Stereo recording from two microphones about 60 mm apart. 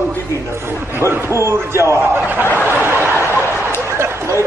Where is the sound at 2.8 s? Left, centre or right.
Right.